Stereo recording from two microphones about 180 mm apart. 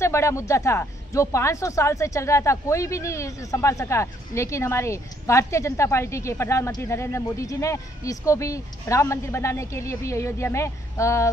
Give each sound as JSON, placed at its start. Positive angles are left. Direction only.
{"t": 0.0, "sound": "speech", "side_deg": 15}